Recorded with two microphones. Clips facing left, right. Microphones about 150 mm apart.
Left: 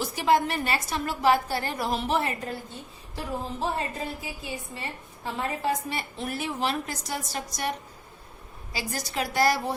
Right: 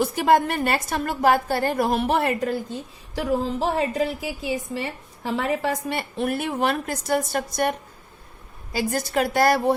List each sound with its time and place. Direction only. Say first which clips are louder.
0.0 s a woman's voice: right 5 dB; 55° right (ahead or behind)
3.2 s a woman's voice: right 8 dB; 90° right; by 9.7 s 55° right (ahead or behind)